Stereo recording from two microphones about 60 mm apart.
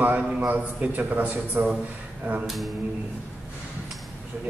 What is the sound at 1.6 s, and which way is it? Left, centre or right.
Speech, right.